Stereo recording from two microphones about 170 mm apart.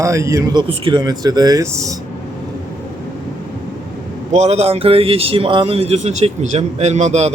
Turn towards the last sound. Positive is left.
turn(degrees=-40)  # may be behind; listen again after turning